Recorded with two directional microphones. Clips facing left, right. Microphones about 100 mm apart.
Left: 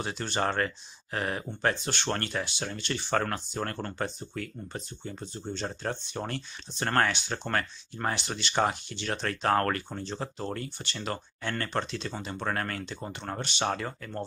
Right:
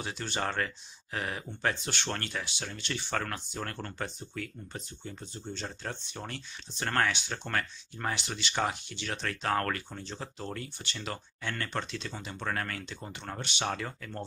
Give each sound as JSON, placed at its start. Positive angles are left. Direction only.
{"t": 0.0, "sound": "speech", "side_deg": 45}